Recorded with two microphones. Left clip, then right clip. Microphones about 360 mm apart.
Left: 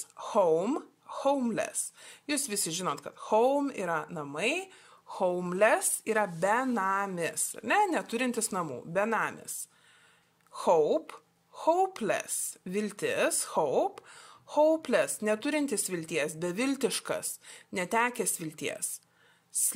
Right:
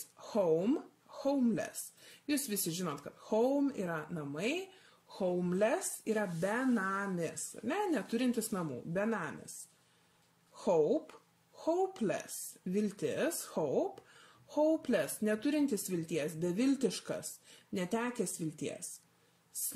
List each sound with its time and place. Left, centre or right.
0.3 s speech: left
0.7 s speech: centre
11.6 s speech: centre
13.6 s speech: left
14.6 s speech: centre